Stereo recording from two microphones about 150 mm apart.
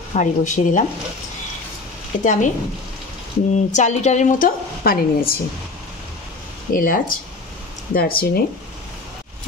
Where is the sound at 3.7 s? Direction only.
50° left (ahead or behind); by 5.3 s 75° left (ahead or behind).